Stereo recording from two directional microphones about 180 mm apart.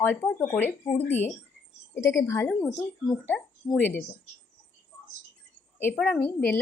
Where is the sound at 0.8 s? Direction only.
25° left (ahead or behind).